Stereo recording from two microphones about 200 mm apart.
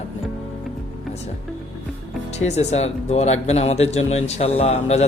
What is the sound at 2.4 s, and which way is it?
A man's voice, 35° left (ahead or behind).